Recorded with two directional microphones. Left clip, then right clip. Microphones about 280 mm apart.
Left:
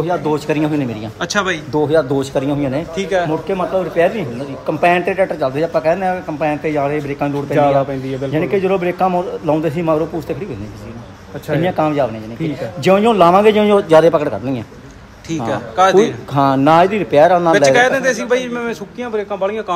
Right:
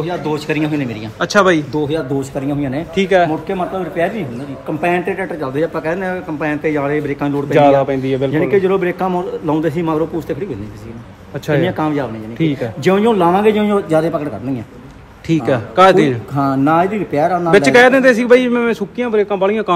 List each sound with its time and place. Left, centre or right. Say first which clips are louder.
0.0 s a man's voice: left 3 dB; centre
1.7 s a man's voice: left 4 dB; centre
3.0 s a man's voice: right 6 dB; right
3.4 s a man's voice: left 2 dB; centre
7.5 s a man's voice: right 3 dB; right
8.3 s a man's voice: right 1 dB; centre
11.6 s a man's voice: left 2 dB; centre
15.2 s a man's voice: right 4 dB; right
16.3 s a man's voice: left 4 dB; centre
17.5 s a man's voice: right 2 dB; right